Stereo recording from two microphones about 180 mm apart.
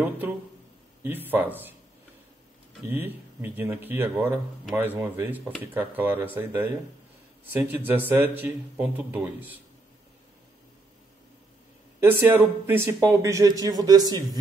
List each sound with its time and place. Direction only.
1.0 s speech: 10° right (ahead or behind)
2.9 s speech: 10° right (ahead or behind)
12.0 s speech: 10° right (ahead or behind)